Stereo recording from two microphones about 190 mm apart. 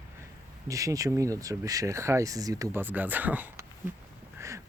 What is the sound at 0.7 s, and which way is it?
Speech, 15° right (ahead or behind).